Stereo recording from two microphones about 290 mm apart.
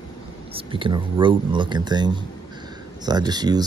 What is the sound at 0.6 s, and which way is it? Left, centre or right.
Speech, centre.